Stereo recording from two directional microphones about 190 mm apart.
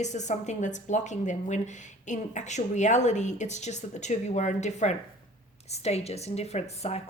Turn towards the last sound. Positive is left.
turn(degrees=35)  # may be behind; listen again after turning